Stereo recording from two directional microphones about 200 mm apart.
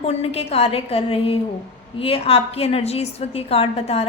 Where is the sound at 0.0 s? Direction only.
30° left (ahead or behind).